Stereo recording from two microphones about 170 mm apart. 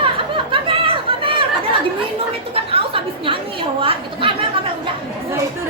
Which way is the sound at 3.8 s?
30° right (ahead or behind).